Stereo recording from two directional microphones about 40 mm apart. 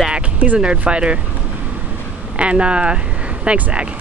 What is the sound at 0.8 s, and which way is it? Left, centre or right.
Speech, right.